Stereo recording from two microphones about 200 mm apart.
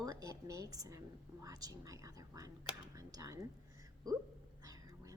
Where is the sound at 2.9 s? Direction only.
15° right (ahead or behind).